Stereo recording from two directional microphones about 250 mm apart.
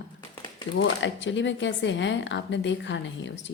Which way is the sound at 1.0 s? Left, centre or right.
Left.